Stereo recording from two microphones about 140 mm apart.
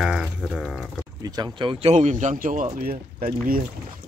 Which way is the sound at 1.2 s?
30° right (ahead or behind).